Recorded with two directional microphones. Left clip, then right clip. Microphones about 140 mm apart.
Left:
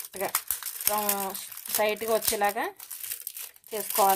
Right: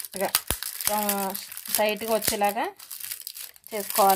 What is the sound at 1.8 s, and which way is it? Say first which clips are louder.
Speech: right 1 dB; 10° right (ahead or behind).